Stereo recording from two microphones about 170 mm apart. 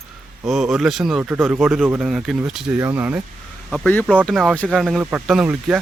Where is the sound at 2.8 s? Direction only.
15° right (ahead or behind).